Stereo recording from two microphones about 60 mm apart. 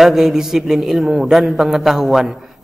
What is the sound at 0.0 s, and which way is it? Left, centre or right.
A man's voice, centre.